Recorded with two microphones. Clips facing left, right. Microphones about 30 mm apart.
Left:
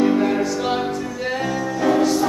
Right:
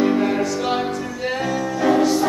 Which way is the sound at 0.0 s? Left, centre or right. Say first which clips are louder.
Left 1 dB; centre.